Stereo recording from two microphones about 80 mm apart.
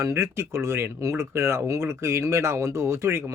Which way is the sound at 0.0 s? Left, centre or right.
Right.